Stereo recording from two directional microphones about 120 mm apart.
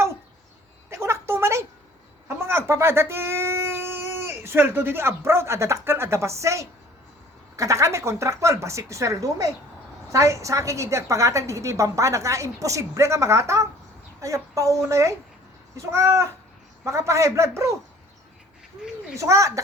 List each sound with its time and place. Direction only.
0.9 s a sound: 20° right (ahead or behind)
2.2 s a woman's voice: 20° right (ahead or behind)
19.1 s a woman's voice: 25° right (ahead or behind)